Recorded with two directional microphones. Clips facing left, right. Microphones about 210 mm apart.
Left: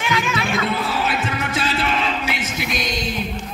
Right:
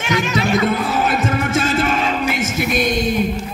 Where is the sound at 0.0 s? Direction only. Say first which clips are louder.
Right 4 dB; 45° right (ahead or behind).